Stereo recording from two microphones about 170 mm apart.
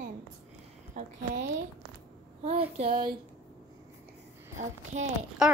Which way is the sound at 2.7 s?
35° right (ahead or behind).